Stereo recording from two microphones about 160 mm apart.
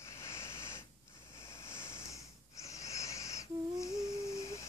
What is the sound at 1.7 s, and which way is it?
Wheeze, 15° left (ahead or behind).